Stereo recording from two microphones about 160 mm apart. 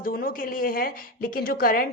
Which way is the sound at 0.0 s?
65° left (ahead or behind).